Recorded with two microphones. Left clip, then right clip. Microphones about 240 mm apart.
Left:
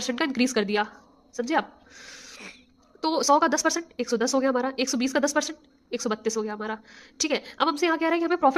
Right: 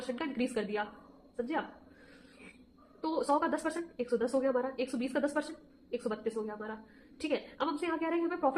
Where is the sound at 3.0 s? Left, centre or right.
Left.